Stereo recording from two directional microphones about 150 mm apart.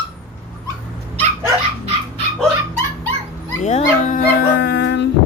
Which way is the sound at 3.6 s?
50° left (ahead or behind).